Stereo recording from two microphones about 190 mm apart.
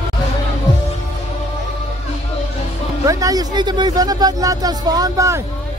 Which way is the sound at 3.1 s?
20° right (ahead or behind).